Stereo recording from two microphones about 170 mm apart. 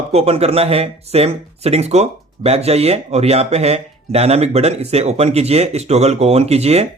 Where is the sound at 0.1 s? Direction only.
35° right (ahead or behind).